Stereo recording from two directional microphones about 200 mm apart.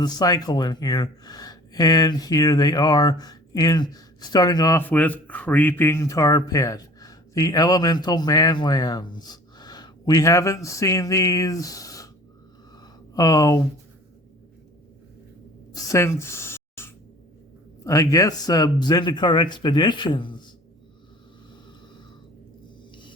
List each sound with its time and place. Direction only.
0.0 s speech: 20° left (ahead or behind)
12.8 s a sound: 15° left (ahead or behind)
15.7 s speech: 15° left (ahead or behind)